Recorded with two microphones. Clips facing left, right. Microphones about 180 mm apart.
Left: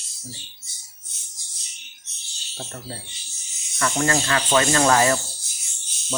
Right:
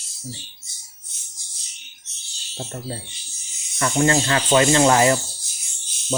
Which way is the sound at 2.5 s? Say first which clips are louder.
Right 4 dB; 25° right (ahead or behind).